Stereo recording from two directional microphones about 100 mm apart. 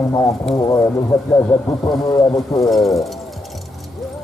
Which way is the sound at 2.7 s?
Centre (ahead or behind).